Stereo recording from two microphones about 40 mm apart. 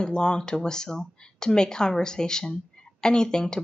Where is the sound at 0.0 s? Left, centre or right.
Left.